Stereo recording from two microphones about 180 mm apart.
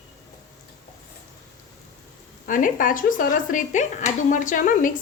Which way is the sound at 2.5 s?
50° left (ahead or behind).